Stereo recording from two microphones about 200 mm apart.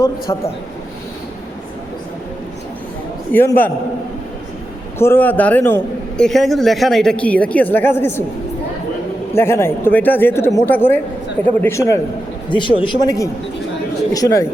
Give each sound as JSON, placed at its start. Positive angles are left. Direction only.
{"t": 0.3, "sound": "speech", "side_deg": 20}
{"t": 3.3, "sound": "a man's voice", "side_deg": 10}
{"t": 4.9, "sound": "a man's voice", "side_deg": 10}
{"t": 9.3, "sound": "a man's voice", "side_deg": 10}